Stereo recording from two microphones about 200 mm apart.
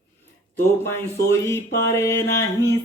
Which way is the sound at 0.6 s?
15° left (ahead or behind).